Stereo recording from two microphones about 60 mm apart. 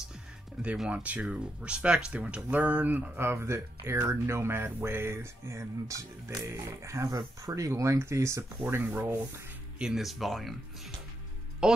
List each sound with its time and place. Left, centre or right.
0.8 s speech: right
3.2 s speech: right
5.9 s speech: right
8.6 s sanding: right
9.8 s speech: centre
11.6 s speech: centre